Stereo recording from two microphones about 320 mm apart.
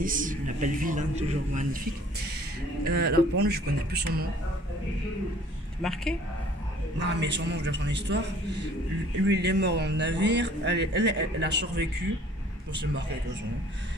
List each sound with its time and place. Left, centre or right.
0.0 s speech: right
2.8 s speech: right
5.8 s speech: centre
7.0 s speech: right